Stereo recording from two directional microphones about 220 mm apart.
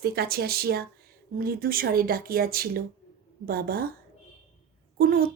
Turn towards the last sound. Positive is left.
turn(degrees=-40)  # may be behind; listen again after turning